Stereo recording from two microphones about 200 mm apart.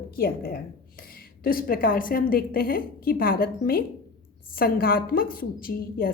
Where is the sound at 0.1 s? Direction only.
50° left (ahead or behind).